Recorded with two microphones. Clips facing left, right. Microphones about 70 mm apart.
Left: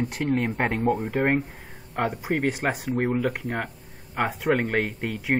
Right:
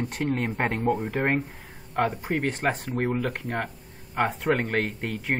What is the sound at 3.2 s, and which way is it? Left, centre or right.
Speech, centre.